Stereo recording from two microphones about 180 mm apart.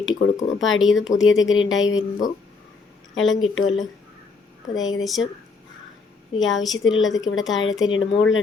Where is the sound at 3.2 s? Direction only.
Centre (ahead or behind).